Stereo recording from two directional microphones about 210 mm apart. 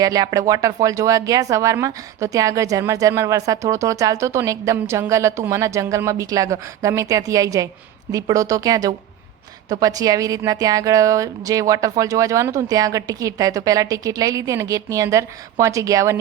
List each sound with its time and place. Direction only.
0.0 s speech: 15° right (ahead or behind)